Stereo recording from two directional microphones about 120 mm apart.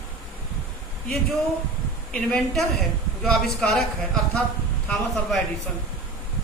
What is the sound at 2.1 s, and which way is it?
Speech, 5° left (ahead or behind).